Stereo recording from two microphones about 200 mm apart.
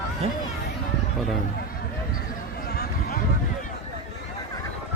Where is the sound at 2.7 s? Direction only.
50° left (ahead or behind).